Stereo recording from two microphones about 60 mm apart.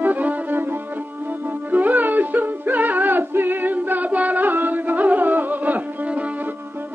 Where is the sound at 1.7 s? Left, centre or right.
Right.